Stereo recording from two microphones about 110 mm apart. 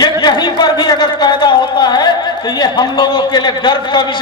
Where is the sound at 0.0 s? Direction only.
40° left (ahead or behind).